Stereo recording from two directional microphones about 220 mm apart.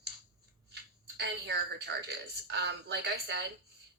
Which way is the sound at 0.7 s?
50° right (ahead or behind).